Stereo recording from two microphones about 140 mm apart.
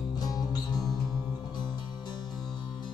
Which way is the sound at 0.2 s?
25° left (ahead or behind).